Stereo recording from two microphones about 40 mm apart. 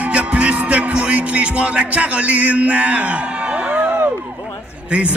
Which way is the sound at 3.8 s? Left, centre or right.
Right.